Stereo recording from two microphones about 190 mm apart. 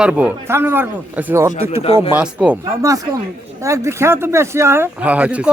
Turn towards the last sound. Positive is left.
turn(degrees=-5)  # may be behind; listen again after turning